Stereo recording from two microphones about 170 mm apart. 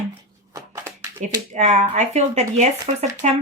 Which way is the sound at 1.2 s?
45° right (ahead or behind).